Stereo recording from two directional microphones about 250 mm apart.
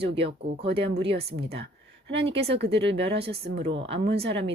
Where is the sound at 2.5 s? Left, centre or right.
Right.